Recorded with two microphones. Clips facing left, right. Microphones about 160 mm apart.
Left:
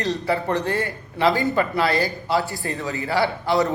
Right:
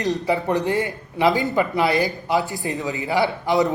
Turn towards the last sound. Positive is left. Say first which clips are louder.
# right 1 dB
turn(degrees=-20)  # may be behind; listen again after turning